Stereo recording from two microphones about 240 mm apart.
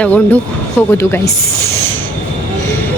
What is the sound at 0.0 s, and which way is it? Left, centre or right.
Speech, centre.